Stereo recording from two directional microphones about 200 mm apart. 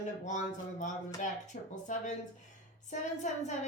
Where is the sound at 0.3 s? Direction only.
40° left (ahead or behind).